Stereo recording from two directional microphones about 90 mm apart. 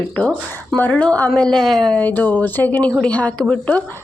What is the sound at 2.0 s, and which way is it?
Speech, 20° left (ahead or behind).